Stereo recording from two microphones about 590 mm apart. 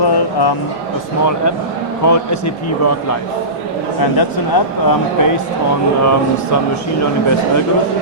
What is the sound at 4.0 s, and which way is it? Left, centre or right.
Speech, left.